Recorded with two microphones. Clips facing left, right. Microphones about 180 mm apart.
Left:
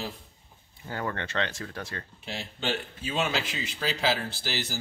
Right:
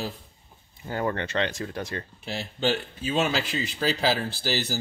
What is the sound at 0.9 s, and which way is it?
Speech, 20° right (ahead or behind).